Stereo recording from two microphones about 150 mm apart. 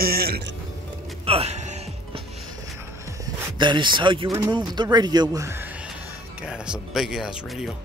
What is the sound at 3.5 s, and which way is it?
Speech, 30° right (ahead or behind).